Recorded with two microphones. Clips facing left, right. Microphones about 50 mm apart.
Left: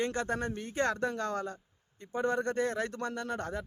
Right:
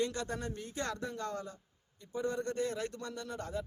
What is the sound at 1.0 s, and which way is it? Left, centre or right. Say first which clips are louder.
A man's voice: left 6 dB; left.